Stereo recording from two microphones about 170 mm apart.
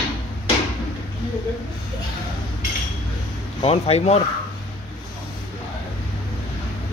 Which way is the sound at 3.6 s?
35° left (ahead or behind).